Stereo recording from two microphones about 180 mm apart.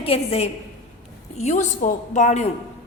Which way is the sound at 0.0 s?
35° left (ahead or behind).